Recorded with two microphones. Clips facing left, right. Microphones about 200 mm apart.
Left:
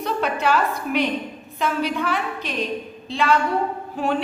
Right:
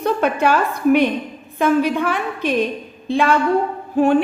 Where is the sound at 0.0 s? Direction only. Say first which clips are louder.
Right 5 dB; 50° right (ahead or behind).